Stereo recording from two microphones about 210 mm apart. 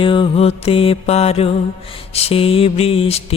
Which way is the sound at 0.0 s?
25° left (ahead or behind).